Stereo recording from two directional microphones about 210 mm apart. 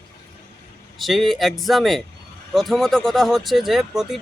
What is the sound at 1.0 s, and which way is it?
Speech, centre (ahead or behind).